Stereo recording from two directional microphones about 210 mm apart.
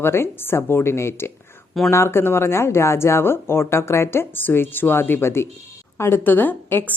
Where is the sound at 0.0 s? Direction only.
10° left (ahead or behind).